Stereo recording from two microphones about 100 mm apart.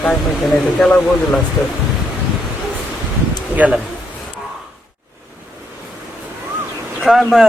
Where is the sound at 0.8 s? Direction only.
5° left (ahead or behind).